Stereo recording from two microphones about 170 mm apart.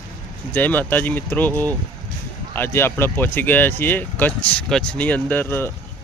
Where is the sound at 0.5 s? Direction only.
10° left (ahead or behind).